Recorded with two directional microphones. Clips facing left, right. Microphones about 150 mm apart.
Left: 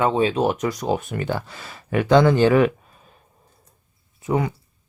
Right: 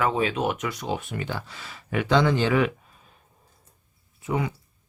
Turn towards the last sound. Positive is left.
turn(degrees=45)  # may be behind; listen again after turning